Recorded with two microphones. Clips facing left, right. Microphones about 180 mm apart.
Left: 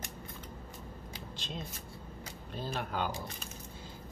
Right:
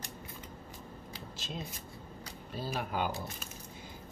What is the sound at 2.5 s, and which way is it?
Speech, 5° right (ahead or behind).